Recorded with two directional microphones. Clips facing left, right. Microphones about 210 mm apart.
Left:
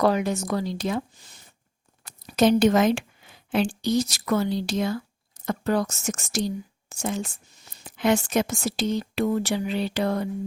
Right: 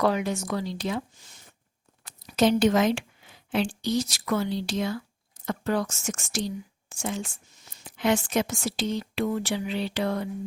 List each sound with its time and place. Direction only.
0.0 s speech: 40° left (ahead or behind)